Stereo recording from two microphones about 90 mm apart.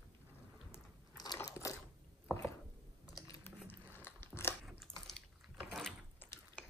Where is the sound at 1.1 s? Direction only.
45° left (ahead or behind).